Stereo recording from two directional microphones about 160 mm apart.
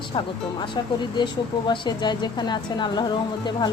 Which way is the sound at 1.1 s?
30° left (ahead or behind).